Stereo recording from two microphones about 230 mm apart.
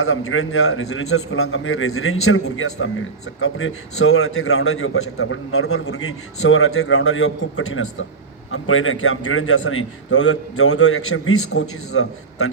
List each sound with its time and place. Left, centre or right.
0.0 s a man's voice: left